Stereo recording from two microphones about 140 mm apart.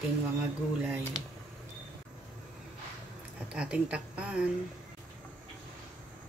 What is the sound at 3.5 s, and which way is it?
Speech, 5° right (ahead or behind).